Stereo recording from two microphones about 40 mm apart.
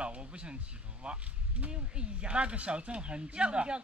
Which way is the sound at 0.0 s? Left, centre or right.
Right.